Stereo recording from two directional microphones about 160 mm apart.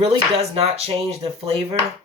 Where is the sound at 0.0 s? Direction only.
35° right (ahead or behind).